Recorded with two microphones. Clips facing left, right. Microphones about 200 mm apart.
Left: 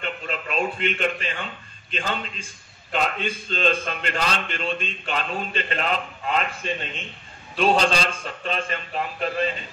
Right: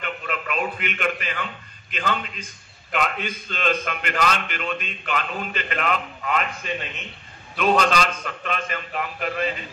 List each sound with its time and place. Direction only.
0.0 s a man's voice: 30° left (ahead or behind)